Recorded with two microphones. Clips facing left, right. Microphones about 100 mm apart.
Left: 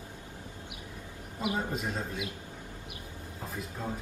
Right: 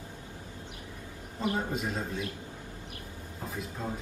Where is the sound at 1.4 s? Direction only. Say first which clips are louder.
Right 1 dB; centre (ahead or behind).